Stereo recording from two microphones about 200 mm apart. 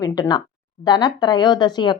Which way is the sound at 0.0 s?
20° left (ahead or behind).